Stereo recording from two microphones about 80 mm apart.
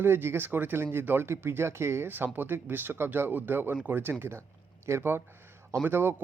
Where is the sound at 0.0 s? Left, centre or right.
Right.